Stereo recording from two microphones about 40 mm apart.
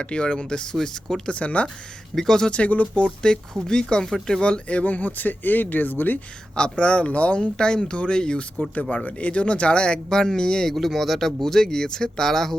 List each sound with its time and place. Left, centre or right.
0.0 s speech: left
2.1 s speech: centre
2.5 s speech: left
4.8 s speech: left
6.6 s speech: left
8.7 s speech: left; by 12.5 s centre